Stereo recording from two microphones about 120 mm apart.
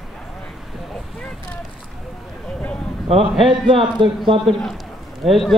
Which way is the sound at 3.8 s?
45° right (ahead or behind).